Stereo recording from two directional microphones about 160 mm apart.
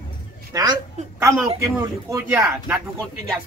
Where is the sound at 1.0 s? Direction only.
50° right (ahead or behind).